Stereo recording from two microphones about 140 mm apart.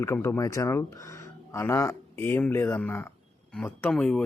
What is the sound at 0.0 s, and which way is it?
Speech, 20° left (ahead or behind).